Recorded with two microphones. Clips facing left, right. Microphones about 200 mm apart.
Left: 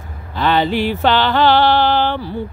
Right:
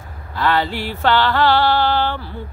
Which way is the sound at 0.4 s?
20° left (ahead or behind).